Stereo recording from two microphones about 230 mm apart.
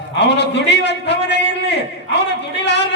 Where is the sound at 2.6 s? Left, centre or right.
Left.